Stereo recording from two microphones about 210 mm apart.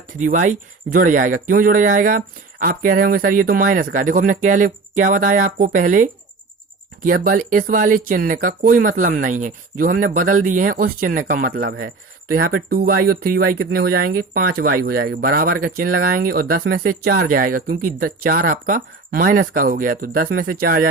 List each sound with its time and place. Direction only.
0.2 s speech: 35° right (ahead or behind)